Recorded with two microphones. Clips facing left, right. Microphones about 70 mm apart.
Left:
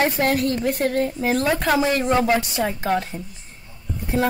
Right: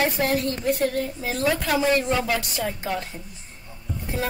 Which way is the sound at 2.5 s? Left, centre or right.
Left.